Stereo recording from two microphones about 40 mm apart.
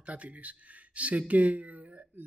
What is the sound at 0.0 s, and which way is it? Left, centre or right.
Speech, right.